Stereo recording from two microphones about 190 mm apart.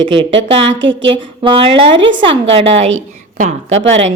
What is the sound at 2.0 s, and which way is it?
Speech, 75° right (ahead or behind).